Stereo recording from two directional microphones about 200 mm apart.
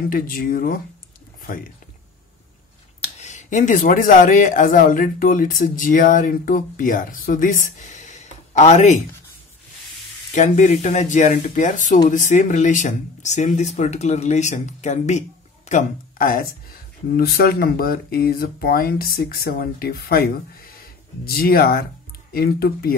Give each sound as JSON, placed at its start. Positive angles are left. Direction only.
{"t": 0.1, "sound": "speech", "side_deg": 45}
{"t": 3.0, "sound": "speech", "side_deg": 35}
{"t": 10.3, "sound": "speech", "side_deg": 40}